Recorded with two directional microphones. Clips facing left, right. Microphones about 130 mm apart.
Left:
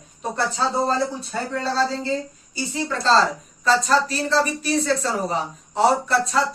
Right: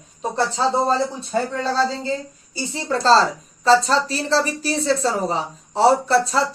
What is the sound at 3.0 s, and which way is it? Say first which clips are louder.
A man's voice: right 3 dB; 35° right (ahead or behind).